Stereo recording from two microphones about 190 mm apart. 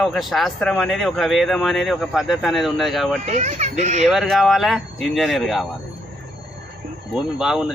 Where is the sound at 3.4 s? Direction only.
40° right (ahead or behind).